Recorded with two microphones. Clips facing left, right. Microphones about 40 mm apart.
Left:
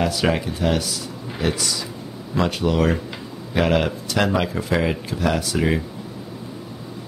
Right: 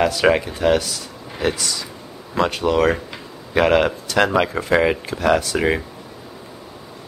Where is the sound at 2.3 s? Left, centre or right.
Centre.